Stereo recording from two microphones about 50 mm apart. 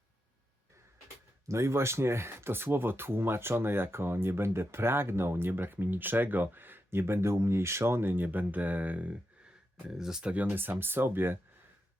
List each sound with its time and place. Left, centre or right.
1.5 s speech: right
9.8 s speech: centre
10.4 s speech: right